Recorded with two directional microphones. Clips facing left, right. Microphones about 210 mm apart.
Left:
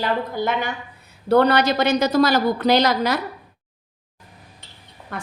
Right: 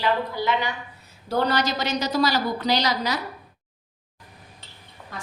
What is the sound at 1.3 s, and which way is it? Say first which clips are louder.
A woman's voice: left 7 dB; 60° left (ahead or behind).